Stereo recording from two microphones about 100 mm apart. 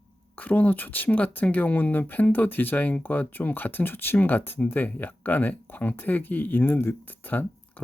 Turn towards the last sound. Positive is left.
turn(degrees=20)  # may be behind; listen again after turning